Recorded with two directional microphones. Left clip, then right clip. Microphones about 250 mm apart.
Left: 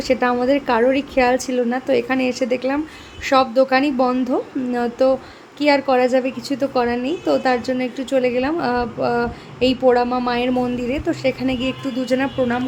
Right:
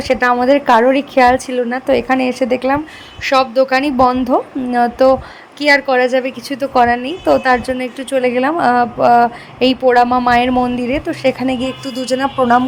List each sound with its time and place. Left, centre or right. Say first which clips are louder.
0.0 s a woman's voice: right 5 dB; centre